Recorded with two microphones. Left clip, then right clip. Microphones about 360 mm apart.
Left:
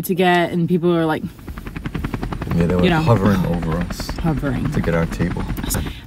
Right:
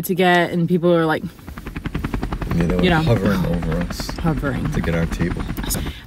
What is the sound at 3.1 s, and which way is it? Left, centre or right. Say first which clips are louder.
Speech: left 2 dB; centre.